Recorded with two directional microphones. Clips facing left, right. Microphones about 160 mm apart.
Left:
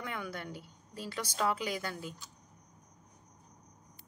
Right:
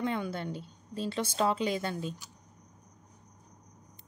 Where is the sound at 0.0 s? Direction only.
25° right (ahead or behind).